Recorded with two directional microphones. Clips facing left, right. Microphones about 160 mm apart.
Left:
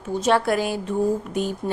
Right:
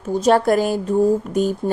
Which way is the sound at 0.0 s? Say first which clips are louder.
Right 5 dB; 40° right (ahead or behind).